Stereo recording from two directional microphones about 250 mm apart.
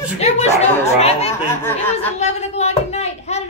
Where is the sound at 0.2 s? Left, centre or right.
Left.